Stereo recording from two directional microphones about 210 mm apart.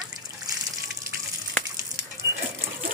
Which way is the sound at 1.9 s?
15° right (ahead or behind).